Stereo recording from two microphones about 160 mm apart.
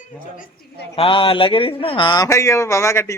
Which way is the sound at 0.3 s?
65° left (ahead or behind).